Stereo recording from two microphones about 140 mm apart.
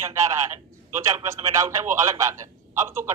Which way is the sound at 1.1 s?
20° right (ahead or behind).